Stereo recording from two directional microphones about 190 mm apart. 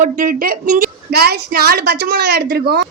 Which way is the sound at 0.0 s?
45° right (ahead or behind).